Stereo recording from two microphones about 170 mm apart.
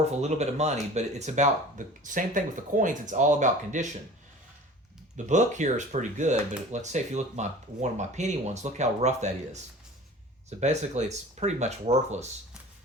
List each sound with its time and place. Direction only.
0.0 s speech: 40° right (ahead or behind)
5.1 s speech: 45° right (ahead or behind)
10.6 s speech: 40° right (ahead or behind)